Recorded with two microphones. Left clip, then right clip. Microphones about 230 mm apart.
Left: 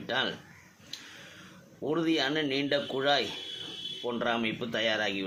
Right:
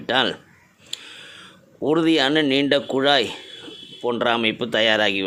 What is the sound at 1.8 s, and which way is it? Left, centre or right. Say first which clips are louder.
Speech: right 10 dB; right.